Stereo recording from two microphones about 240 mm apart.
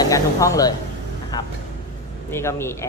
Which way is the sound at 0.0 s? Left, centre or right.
Centre.